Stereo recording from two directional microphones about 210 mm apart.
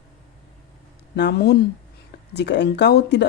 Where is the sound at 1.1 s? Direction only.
50° left (ahead or behind).